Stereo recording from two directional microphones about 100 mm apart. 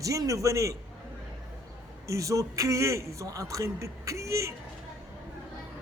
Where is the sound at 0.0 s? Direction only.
35° right (ahead or behind).